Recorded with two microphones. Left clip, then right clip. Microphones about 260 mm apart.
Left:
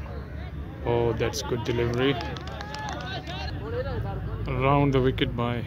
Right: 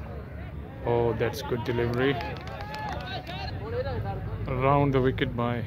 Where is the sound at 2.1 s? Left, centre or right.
Right.